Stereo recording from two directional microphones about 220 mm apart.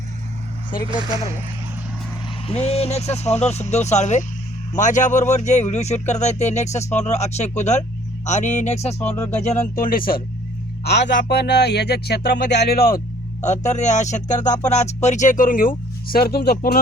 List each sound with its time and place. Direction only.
2.5 s speech: 25° left (ahead or behind)
9.0 s speech: 10° left (ahead or behind)
9.4 s speech: 35° left (ahead or behind)
10.8 s speech: 50° left (ahead or behind)
13.4 s speech: 30° left (ahead or behind)